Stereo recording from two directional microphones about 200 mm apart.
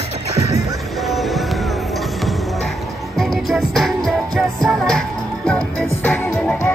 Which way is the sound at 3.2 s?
Centre (ahead or behind).